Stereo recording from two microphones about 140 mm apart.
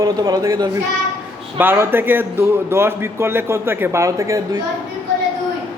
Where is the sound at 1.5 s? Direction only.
15° right (ahead or behind).